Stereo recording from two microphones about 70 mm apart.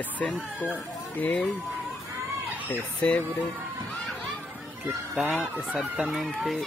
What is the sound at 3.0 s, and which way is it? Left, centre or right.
Speech, centre.